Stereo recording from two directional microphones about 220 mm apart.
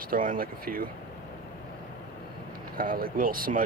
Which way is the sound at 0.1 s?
40° right (ahead or behind).